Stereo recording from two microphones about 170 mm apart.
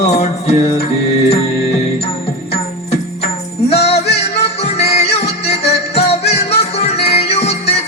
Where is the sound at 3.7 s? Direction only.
35° left (ahead or behind).